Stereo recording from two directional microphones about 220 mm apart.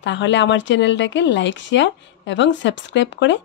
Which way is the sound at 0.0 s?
55° left (ahead or behind).